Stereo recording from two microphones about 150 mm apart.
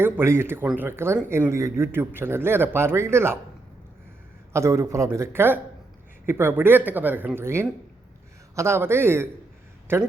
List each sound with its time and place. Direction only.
0.0 s speech: 15° right (ahead or behind)
4.5 s a man's voice: 20° right (ahead or behind)